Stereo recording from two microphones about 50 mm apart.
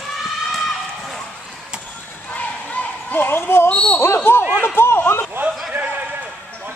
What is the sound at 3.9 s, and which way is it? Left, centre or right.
Speech, left.